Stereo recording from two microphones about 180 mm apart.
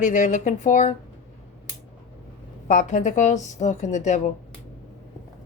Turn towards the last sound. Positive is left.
turn(degrees=40)  # may be behind; listen again after turning